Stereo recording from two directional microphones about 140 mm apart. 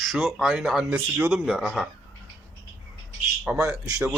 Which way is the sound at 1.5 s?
Centre (ahead or behind).